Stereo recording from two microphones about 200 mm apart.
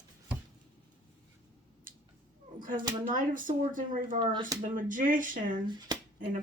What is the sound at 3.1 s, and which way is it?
Speech, 40° right (ahead or behind).